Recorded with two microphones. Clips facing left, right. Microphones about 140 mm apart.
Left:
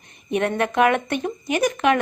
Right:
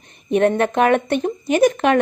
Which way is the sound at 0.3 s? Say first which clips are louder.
Right 4 dB; 30° right (ahead or behind).